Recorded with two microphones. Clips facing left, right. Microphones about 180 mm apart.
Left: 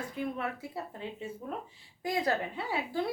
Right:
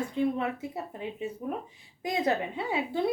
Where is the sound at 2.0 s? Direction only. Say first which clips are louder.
Right 3 dB; 20° right (ahead or behind).